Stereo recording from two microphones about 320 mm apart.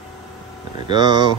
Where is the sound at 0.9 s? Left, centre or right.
Centre.